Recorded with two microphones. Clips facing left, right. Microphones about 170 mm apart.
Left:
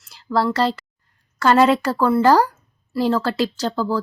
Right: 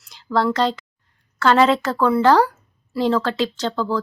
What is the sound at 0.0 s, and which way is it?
Speech, 5° left (ahead or behind).